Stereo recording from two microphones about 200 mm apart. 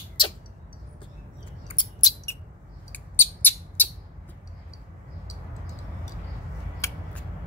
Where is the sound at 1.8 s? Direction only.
20° left (ahead or behind).